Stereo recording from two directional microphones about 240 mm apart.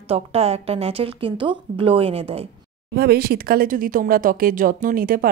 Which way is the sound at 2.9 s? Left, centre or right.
Right.